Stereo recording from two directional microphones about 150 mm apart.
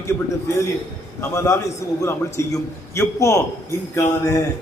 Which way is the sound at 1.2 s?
20° left (ahead or behind).